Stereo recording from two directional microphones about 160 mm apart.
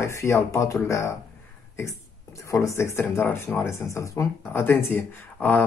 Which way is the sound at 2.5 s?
20° left (ahead or behind).